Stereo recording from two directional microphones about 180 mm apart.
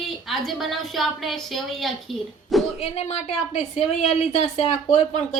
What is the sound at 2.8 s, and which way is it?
A woman's voice, 35° left (ahead or behind).